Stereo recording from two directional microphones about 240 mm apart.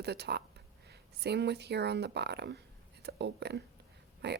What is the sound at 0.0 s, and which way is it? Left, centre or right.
Speech, right.